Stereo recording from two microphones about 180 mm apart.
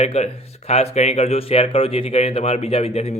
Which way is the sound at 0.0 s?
35° left (ahead or behind).